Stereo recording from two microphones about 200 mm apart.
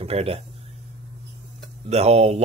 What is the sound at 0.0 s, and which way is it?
Speech, 30° right (ahead or behind).